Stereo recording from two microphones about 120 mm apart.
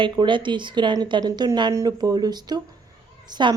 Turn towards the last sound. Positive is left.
turn(degrees=-40)  # may be behind; listen again after turning